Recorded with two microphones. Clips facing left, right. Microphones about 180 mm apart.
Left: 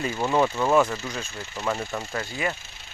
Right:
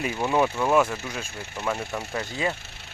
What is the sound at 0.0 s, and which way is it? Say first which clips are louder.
Speech: even; 10° right (ahead or behind).